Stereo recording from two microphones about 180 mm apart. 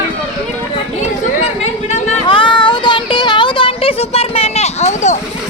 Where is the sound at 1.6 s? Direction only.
30° left (ahead or behind).